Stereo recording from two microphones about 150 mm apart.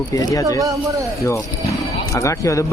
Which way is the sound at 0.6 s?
20° right (ahead or behind).